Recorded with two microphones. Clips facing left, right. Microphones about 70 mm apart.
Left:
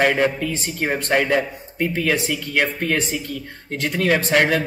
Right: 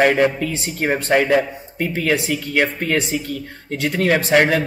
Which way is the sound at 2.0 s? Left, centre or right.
Centre.